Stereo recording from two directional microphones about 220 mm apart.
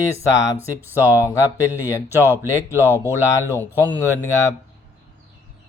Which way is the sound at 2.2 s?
10° right (ahead or behind).